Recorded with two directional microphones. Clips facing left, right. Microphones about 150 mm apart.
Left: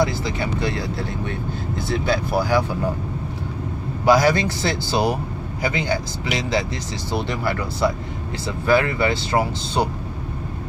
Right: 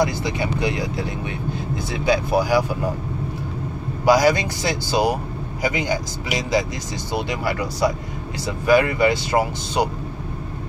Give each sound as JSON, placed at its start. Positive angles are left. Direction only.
{"t": 0.4, "sound": "speech", "side_deg": -15}
{"t": 4.0, "sound": "speech", "side_deg": -10}